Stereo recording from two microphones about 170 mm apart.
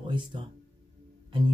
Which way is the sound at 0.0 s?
30° right (ahead or behind).